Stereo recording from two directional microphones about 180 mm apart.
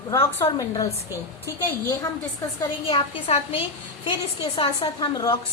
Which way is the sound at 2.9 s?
30° left (ahead or behind).